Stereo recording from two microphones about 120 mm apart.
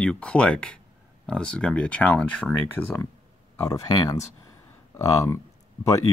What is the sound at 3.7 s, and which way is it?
Speech, 30° left (ahead or behind).